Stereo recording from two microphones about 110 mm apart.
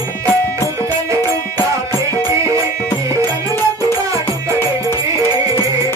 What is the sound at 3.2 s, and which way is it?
Music, 20° left (ahead or behind).